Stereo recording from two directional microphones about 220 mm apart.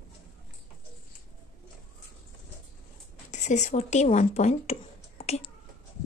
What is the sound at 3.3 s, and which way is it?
Speech, 30° left (ahead or behind).